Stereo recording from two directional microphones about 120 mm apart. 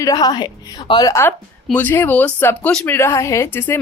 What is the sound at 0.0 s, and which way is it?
A woman's voice, 30° left (ahead or behind).